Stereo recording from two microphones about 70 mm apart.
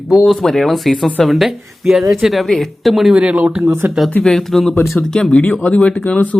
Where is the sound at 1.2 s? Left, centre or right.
Centre.